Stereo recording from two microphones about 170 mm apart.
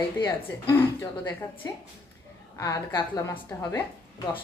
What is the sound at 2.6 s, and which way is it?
A woman's voice, 20° left (ahead or behind).